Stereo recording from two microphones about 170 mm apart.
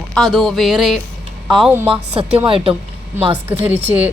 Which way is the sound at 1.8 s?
35° right (ahead or behind).